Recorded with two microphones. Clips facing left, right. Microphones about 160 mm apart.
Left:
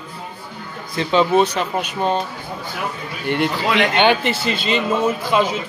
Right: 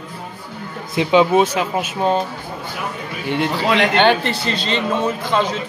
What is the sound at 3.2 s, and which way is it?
A man's voice, centre (ahead or behind).